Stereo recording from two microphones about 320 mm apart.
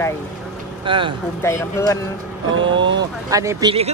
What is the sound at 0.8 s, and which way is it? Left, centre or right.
Speech, centre.